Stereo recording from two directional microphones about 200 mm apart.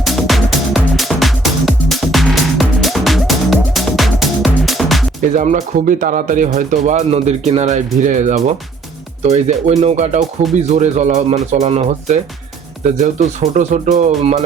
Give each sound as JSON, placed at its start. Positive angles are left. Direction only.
{"t": 0.0, "sound": "music", "side_deg": 0}
{"t": 5.3, "sound": "speech", "side_deg": -35}